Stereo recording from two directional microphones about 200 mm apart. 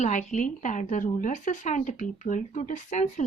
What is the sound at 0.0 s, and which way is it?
A woman's voice, 40° left (ahead or behind).